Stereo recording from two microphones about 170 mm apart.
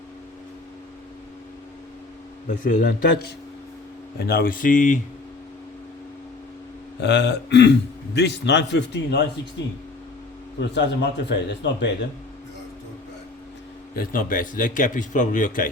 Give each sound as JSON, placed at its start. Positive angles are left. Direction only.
{"t": 2.6, "sound": "speech", "side_deg": 50}
{"t": 7.0, "sound": "a man's voice", "side_deg": 90}
{"t": 10.8, "sound": "a man's voice", "side_deg": 90}
{"t": 13.9, "sound": "a man's voice", "side_deg": 55}